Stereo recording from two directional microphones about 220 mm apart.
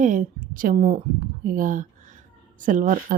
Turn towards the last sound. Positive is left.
turn(degrees=-40)  # may be behind; listen again after turning